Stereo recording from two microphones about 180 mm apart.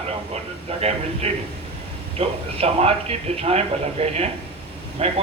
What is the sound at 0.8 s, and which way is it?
Speech, 35° right (ahead or behind).